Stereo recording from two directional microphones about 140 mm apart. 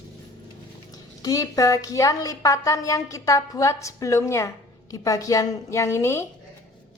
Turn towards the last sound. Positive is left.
turn(degrees=20)  # may be behind; listen again after turning